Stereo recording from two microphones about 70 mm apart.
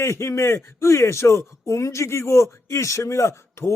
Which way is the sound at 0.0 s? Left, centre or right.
Left.